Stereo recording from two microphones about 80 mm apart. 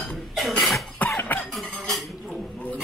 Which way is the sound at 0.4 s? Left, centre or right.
Centre.